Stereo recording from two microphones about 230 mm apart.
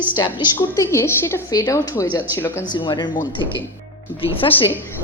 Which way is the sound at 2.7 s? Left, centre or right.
Centre.